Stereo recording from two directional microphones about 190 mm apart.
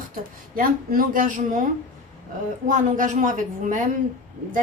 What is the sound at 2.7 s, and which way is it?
A woman's voice, 45° right (ahead or behind).